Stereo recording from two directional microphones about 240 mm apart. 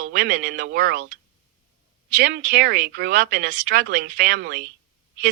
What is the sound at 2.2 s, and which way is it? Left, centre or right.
A woman's voice, right.